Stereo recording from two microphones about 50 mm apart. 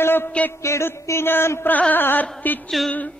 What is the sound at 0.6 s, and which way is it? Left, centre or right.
Speech, left.